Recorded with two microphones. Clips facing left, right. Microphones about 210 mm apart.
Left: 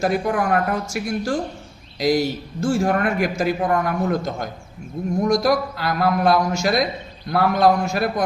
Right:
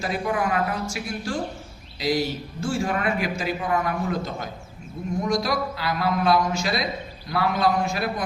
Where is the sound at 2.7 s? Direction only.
50° left (ahead or behind).